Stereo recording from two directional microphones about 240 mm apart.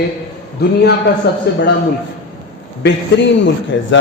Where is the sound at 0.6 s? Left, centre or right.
Left.